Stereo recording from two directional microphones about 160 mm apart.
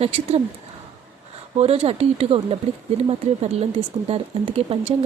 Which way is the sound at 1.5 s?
40° right (ahead or behind).